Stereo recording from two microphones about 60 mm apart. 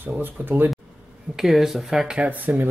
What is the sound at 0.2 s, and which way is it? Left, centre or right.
Speech, right.